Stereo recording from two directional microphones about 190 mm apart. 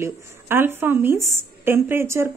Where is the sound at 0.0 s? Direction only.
10° right (ahead or behind).